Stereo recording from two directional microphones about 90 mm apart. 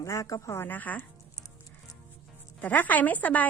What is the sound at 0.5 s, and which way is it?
Speech, 20° left (ahead or behind).